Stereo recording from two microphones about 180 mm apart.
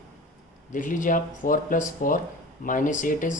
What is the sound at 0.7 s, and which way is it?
Speech, 45° left (ahead or behind).